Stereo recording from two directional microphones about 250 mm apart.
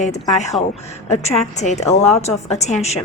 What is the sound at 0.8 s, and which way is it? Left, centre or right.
A woman's voice, left.